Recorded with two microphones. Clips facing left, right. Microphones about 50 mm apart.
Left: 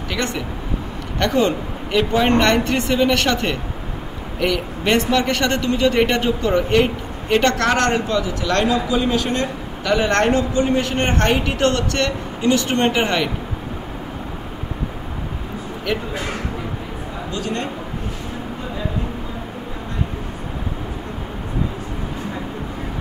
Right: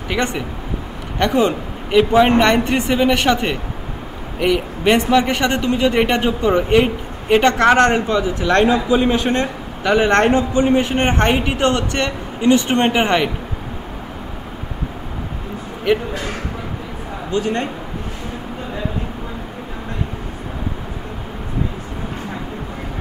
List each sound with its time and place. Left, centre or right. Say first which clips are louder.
0.1 s speech: right 4 dB; centre
1.2 s a man's voice: right 2 dB; centre
15.9 s speech: right 7 dB; centre
17.3 s speech: right 6 dB; right